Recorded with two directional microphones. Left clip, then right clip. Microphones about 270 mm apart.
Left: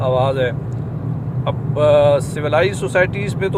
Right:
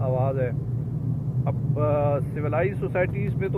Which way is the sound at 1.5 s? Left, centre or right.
Centre.